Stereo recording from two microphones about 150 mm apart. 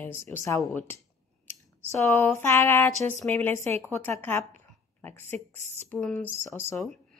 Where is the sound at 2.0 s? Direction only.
15° left (ahead or behind).